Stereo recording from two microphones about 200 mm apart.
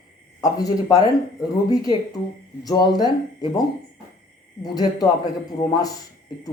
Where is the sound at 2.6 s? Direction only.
20° left (ahead or behind).